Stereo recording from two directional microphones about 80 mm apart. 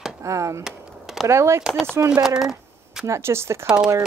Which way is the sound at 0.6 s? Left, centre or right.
Centre.